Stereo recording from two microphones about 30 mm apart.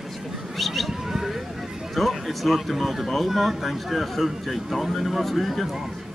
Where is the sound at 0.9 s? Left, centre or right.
Centre.